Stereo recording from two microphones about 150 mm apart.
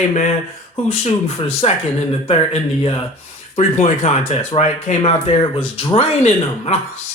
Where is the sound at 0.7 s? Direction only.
40° left (ahead or behind).